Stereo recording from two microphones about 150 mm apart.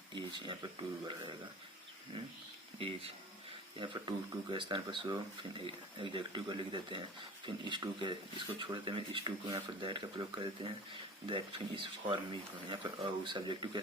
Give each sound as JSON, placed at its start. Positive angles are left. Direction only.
{"t": 0.3, "sound": "speech", "side_deg": -30}
{"t": 2.7, "sound": "speech", "side_deg": -40}